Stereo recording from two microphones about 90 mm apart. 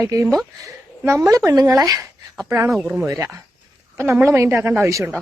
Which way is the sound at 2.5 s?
25° right (ahead or behind).